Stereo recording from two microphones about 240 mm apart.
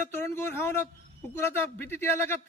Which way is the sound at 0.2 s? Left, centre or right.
Centre.